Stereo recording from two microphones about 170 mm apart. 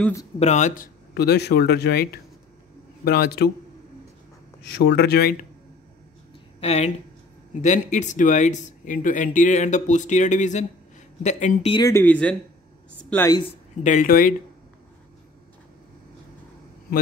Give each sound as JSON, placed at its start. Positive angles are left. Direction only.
{"t": 0.4, "sound": "speech", "side_deg": 45}
{"t": 1.1, "sound": "speech", "side_deg": 70}
{"t": 3.1, "sound": "speech", "side_deg": 65}
{"t": 4.7, "sound": "speech", "side_deg": 75}
{"t": 6.6, "sound": "speech", "side_deg": 40}
{"t": 11.7, "sound": "speech", "side_deg": 20}
{"t": 13.3, "sound": "speech", "side_deg": 30}
{"t": 13.8, "sound": "speech", "side_deg": 50}